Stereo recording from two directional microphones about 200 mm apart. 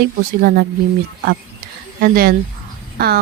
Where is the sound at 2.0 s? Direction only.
45° right (ahead or behind).